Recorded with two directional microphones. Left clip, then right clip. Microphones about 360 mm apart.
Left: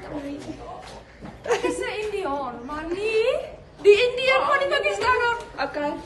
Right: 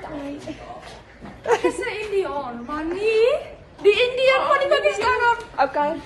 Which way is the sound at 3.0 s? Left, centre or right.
Centre.